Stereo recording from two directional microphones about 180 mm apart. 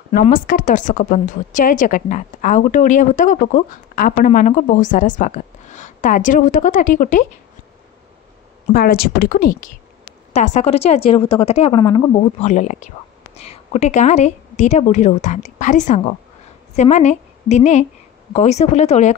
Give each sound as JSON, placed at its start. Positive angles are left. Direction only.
{"t": 0.2, "sound": "a woman's voice", "side_deg": 50}
{"t": 8.7, "sound": "speech", "side_deg": 55}
{"t": 10.3, "sound": "a woman's voice", "side_deg": 40}